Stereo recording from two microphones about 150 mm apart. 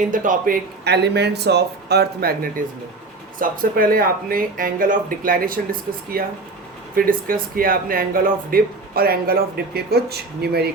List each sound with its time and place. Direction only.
0.1 s a man's voice: 65° right (ahead or behind); by 2.6 s 85° right
3.3 s speech: 65° right (ahead or behind); by 10.7 s 90° right